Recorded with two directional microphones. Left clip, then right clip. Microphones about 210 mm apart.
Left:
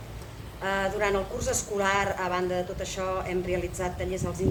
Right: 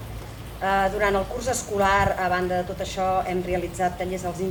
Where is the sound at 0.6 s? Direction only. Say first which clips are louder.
Right 5 dB; 25° left (ahead or behind).